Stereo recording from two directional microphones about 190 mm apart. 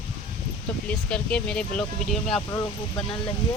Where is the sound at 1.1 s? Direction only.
5° left (ahead or behind).